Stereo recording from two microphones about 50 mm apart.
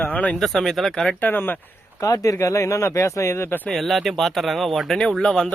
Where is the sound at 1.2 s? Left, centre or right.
Left.